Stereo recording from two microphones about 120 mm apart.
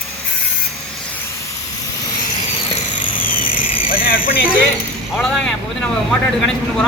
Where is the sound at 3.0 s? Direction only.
90° left.